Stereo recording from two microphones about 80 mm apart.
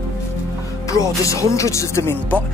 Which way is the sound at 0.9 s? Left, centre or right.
Left.